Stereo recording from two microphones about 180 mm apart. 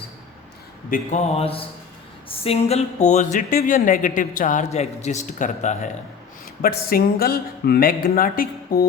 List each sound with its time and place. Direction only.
0.9 s mantra: 45° left (ahead or behind)
2.4 s speech: 35° left (ahead or behind)
6.6 s speech: 55° left (ahead or behind)